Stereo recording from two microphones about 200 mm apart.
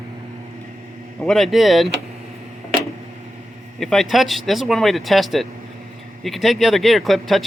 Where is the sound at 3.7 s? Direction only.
Centre (ahead or behind).